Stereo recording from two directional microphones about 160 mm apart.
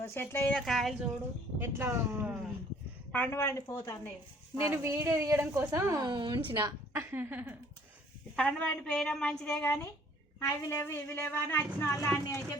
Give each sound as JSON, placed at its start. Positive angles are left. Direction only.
{"t": 0.1, "sound": "a woman's voice", "side_deg": 15}
{"t": 0.5, "sound": "a woman's voice", "side_deg": 0}
{"t": 1.5, "sound": "speech", "side_deg": -15}
{"t": 3.1, "sound": "a woman's voice", "side_deg": 10}
{"t": 4.5, "sound": "a woman's voice", "side_deg": -15}
{"t": 6.9, "sound": "speech", "side_deg": -15}
{"t": 8.4, "sound": "a woman's voice", "side_deg": 5}